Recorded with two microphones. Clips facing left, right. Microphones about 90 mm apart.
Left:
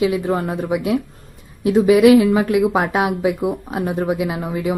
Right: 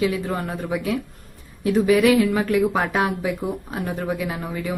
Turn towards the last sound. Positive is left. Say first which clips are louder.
# left 5 dB
turn(degrees=20)  # may be behind; listen again after turning